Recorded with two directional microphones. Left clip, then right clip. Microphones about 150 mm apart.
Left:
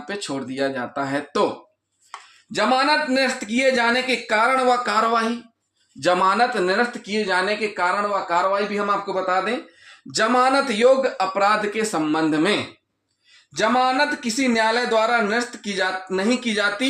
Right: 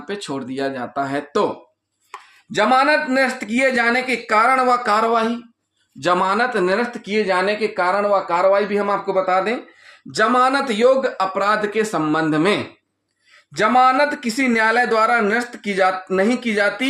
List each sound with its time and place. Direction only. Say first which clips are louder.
0.1 s speech: right 2 dB; 20° right (ahead or behind)
2.5 s speech: right 3 dB; 40° right (ahead or behind)
10.1 s speech: right 2 dB; 20° right (ahead or behind)
13.5 s speech: right 5 dB; 45° right (ahead or behind)